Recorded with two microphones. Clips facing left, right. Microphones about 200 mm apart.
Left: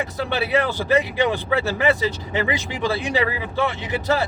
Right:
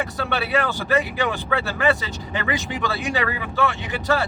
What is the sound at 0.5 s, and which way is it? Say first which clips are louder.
Speech: left 2 dB; 25° left (ahead or behind).